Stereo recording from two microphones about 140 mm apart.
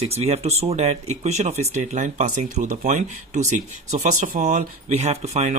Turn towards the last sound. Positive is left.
turn(degrees=-55)  # may be behind; listen again after turning